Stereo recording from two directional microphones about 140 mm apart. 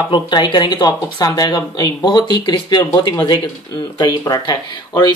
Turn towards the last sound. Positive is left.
turn(degrees=30)  # may be behind; listen again after turning